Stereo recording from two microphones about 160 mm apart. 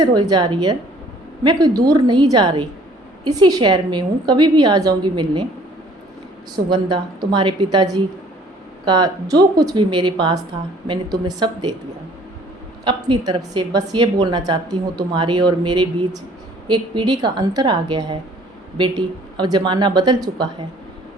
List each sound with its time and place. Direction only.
0.0 s a woman's voice: 25° right (ahead or behind)
6.7 s a woman's voice: 30° right (ahead or behind)
12.8 s a woman's voice: 30° right (ahead or behind)